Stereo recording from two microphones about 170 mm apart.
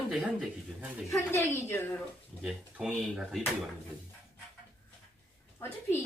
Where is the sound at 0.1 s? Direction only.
5° right (ahead or behind).